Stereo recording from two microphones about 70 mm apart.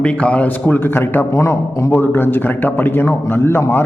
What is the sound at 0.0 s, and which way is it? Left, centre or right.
A man's voice, centre.